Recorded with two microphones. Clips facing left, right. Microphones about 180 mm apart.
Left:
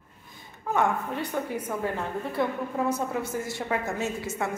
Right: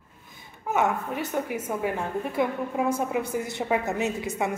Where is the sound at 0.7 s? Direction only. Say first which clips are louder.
Right 1 dB; 5° right (ahead or behind).